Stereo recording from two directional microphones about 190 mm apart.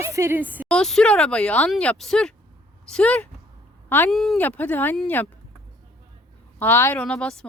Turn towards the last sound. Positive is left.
turn(degrees=5)  # may be behind; listen again after turning